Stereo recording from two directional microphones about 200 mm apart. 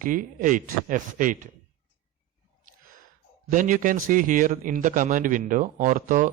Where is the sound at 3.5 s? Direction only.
40° right (ahead or behind).